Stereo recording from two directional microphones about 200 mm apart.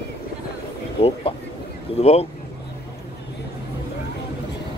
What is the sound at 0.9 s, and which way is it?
Speech, 30° left (ahead or behind).